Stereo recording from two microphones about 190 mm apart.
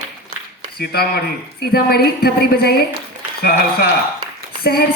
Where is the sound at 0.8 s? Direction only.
55° left (ahead or behind).